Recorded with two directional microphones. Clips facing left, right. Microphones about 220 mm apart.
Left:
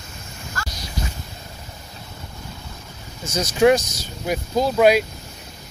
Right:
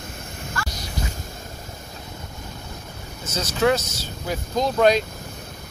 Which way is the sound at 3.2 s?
10° left (ahead or behind).